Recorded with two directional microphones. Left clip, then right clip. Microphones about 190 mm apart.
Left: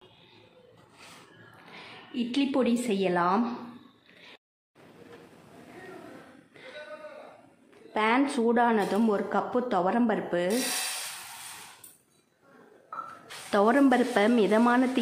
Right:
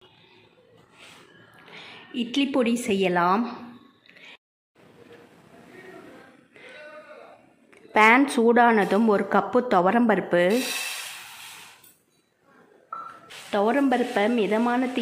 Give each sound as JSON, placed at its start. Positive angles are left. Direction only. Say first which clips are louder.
{"t": 1.7, "sound": "a woman's voice", "louder": "right 3 dB", "side_deg": -10}
{"t": 6.5, "sound": "a sound", "louder": "even", "side_deg": 0}
{"t": 7.9, "sound": "speech", "louder": "right 8 dB", "side_deg": -20}
{"t": 13.5, "sound": "a woman's voice", "louder": "even", "side_deg": 5}